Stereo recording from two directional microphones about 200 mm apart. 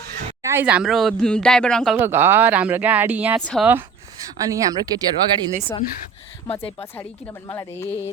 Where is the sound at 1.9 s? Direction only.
10° right (ahead or behind).